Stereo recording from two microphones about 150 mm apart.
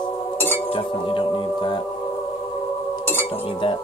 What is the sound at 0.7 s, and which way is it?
Music, 35° left (ahead or behind).